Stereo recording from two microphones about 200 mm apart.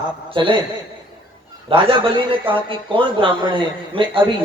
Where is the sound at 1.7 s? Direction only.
25° right (ahead or behind).